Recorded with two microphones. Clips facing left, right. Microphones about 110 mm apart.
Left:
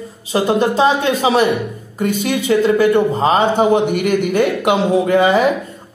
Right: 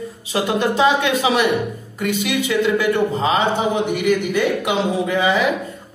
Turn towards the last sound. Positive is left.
turn(degrees=45)  # may be behind; listen again after turning